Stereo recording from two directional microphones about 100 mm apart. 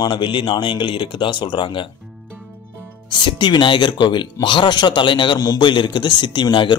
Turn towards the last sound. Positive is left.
turn(degrees=50)  # may be behind; listen again after turning